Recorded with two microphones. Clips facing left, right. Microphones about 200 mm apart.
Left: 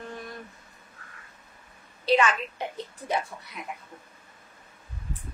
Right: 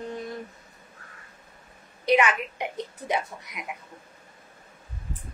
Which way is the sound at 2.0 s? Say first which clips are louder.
Right 1 dB; 20° right (ahead or behind).